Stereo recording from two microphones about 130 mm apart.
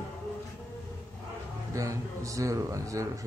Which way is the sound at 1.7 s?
25° right (ahead or behind).